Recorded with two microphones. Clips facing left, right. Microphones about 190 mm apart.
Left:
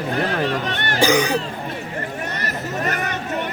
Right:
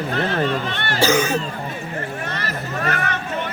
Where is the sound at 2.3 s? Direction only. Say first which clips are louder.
Left 1 dB; 20° left (ahead or behind).